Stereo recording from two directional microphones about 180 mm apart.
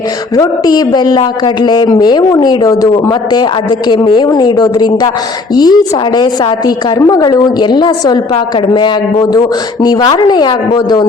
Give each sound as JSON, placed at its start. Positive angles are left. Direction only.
{"t": 0.3, "sound": "a man's voice", "side_deg": 20}